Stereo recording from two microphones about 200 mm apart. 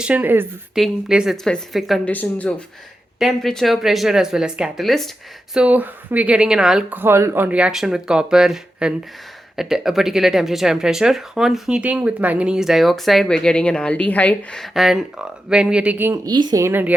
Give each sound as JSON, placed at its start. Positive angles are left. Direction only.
{"t": 0.0, "sound": "speech", "side_deg": -10}